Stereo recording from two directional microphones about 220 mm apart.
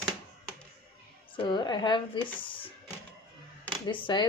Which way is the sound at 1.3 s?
20° left (ahead or behind).